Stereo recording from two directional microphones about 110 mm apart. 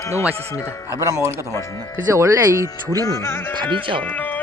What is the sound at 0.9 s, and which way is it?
Speech, 25° right (ahead or behind).